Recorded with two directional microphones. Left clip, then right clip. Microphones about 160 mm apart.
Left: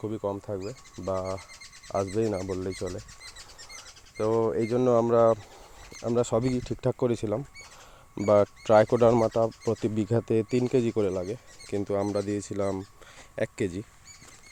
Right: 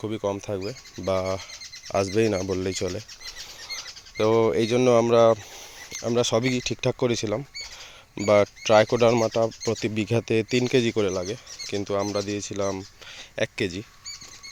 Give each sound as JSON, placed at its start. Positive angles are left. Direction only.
{"t": 0.0, "sound": "speech", "side_deg": -5}
{"t": 3.7, "sound": "a sound", "side_deg": -15}
{"t": 5.9, "sound": "speech", "side_deg": 0}
{"t": 9.2, "sound": "speech", "side_deg": 0}
{"t": 11.9, "sound": "speech", "side_deg": 20}